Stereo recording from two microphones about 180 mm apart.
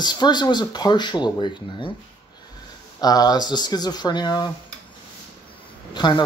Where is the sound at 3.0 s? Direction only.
20° left (ahead or behind).